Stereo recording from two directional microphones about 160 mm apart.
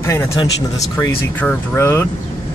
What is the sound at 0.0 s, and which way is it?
Speech, 15° left (ahead or behind).